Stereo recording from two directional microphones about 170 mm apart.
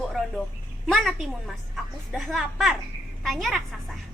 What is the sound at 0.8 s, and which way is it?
A woman's voice, centre (ahead or behind).